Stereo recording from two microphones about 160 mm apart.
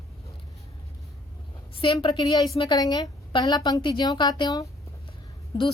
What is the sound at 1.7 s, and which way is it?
A woman's voice, 35° left (ahead or behind).